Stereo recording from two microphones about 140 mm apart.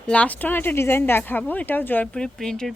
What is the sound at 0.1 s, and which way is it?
Speech, 10° left (ahead or behind).